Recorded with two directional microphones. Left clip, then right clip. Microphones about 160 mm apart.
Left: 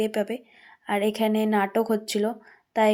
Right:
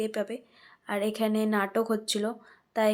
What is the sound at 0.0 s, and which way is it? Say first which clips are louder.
Speech: left 5 dB; 20° left (ahead or behind).